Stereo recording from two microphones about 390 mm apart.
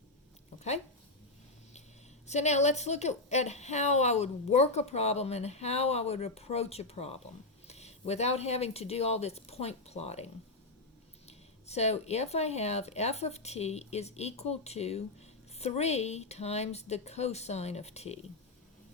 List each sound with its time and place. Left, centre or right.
2.2 s speech: centre
11.3 s speech: centre